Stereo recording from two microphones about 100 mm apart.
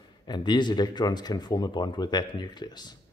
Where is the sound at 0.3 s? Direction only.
50° left (ahead or behind).